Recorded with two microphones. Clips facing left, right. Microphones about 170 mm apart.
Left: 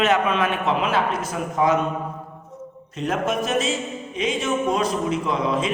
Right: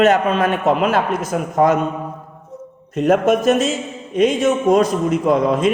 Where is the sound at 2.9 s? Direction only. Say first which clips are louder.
Right 9 dB; 50° right (ahead or behind).